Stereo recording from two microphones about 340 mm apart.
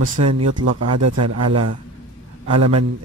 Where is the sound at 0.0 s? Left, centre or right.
Right.